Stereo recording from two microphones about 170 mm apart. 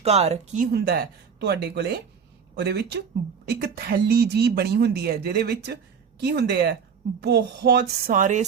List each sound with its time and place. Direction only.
0.0 s speech: 40° right (ahead or behind)
0.7 s speech: 70° right (ahead or behind)
8.1 s a sound: 45° right (ahead or behind)